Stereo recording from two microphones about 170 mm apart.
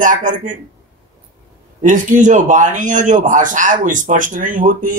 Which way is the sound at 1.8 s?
50° right (ahead or behind).